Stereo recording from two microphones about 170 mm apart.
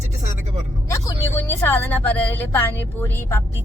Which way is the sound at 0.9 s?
15° left (ahead or behind).